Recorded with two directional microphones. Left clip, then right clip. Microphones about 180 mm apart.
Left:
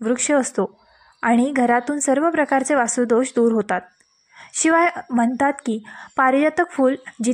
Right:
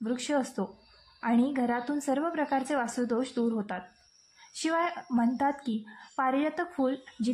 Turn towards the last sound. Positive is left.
turn(degrees=40)  # may be behind; listen again after turning